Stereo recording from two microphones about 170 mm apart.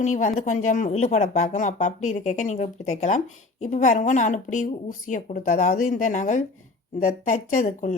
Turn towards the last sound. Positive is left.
turn(degrees=45)  # may be behind; listen again after turning